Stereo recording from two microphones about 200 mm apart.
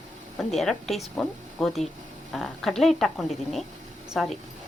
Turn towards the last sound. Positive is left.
turn(degrees=0)  # may be behind; listen again after turning